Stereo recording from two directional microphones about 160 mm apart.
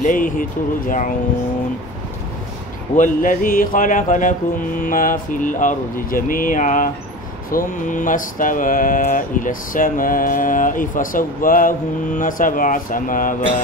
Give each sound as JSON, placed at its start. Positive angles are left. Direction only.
{"t": 0.0, "sound": "mantra", "side_deg": 55}
{"t": 3.0, "sound": "mantra", "side_deg": 55}